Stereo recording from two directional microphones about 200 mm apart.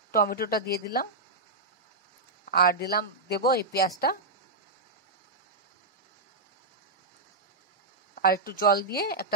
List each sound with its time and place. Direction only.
0.1 s speech: 50° left (ahead or behind)
2.4 s speech: 45° left (ahead or behind)
8.1 s speech: 50° left (ahead or behind)